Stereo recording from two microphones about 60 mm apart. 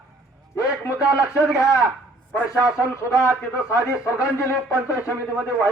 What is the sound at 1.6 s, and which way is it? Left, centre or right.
Speech, left.